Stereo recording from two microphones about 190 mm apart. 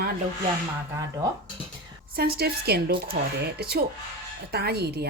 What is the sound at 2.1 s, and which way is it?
A woman's voice, 55° right (ahead or behind).